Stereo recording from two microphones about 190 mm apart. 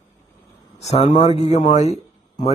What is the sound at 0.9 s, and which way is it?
A man's voice, 35° left (ahead or behind).